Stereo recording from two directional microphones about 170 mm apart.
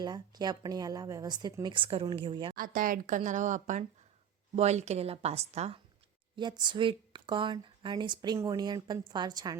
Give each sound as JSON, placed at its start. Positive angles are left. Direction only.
{"t": 0.0, "sound": "speech", "side_deg": -25}
{"t": 2.6, "sound": "speech", "side_deg": -55}
{"t": 6.3, "sound": "speech", "side_deg": -25}